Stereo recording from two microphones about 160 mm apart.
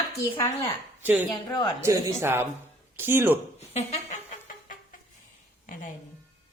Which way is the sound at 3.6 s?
45° left (ahead or behind).